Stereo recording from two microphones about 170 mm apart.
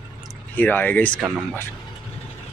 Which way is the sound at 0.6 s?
10° left (ahead or behind).